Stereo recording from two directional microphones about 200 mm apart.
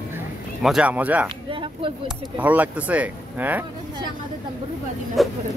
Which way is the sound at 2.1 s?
10° right (ahead or behind).